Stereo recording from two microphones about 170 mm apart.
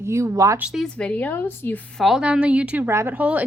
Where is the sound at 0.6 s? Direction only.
Centre (ahead or behind).